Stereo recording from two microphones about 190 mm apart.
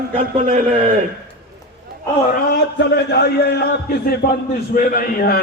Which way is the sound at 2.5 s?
65° left (ahead or behind).